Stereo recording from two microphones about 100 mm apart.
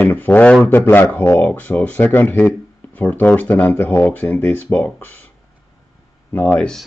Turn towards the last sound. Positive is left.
turn(degrees=15)  # may be behind; listen again after turning